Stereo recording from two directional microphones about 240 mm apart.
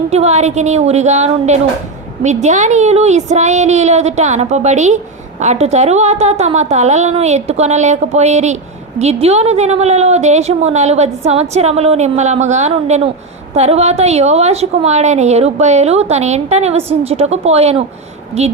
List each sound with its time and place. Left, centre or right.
0.1 s a woman's voice: right